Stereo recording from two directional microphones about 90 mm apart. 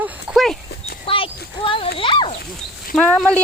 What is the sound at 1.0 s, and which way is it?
Speech, 85° left.